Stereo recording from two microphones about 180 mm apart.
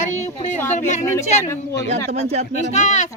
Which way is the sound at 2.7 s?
40° left (ahead or behind).